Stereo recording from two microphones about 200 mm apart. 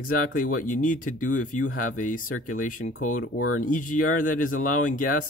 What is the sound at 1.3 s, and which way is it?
Speech, 90° left.